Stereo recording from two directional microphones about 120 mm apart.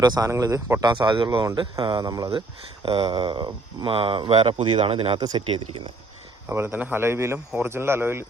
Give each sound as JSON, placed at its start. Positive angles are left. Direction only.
{"t": 0.0, "sound": "speech", "side_deg": -35}
{"t": 0.9, "sound": "speech", "side_deg": -40}
{"t": 2.8, "sound": "speech", "side_deg": -45}
{"t": 5.2, "sound": "speech", "side_deg": -40}
{"t": 6.5, "sound": "speech", "side_deg": -20}